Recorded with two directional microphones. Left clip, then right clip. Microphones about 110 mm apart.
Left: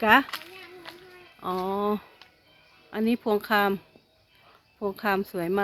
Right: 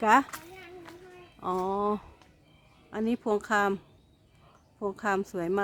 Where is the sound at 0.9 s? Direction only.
90° left.